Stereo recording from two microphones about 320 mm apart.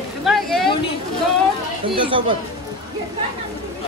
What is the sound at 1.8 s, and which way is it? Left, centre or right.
Speech, centre.